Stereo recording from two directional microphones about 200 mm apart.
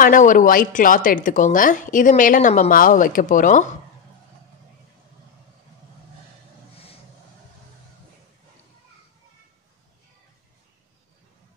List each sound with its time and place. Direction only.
0.0 s speech: 40° left (ahead or behind)